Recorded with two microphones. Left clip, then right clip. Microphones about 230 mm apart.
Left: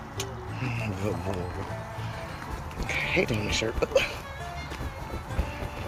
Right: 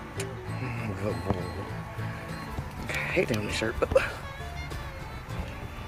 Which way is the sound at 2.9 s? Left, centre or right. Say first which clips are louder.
Left 1 dB; centre.